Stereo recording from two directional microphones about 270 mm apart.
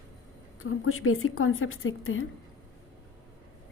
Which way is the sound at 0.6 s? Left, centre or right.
Left.